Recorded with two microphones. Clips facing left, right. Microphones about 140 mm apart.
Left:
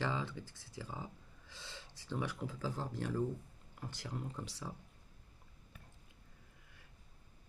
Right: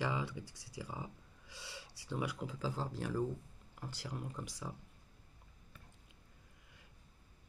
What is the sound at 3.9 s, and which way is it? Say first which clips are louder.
Speech: right 1 dB; 10° right (ahead or behind).